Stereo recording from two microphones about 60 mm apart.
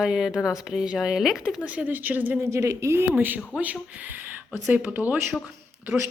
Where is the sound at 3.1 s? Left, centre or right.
Right.